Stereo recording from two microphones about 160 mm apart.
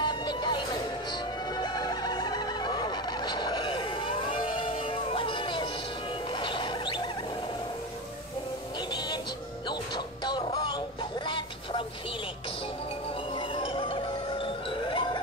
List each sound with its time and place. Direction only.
0.0 s music: 30° left (ahead or behind)
8.9 s music: 30° left (ahead or behind)
13.3 s music: 30° left (ahead or behind)